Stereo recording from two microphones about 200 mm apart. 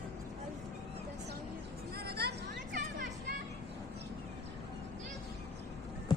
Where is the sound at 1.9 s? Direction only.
55° right (ahead or behind).